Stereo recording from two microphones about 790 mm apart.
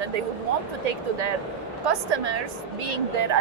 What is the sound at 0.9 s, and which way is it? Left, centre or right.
Speech, right.